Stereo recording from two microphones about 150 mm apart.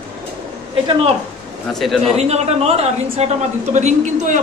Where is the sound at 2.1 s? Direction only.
45° right (ahead or behind).